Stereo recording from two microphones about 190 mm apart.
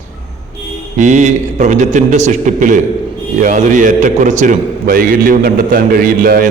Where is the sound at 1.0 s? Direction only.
40° right (ahead or behind).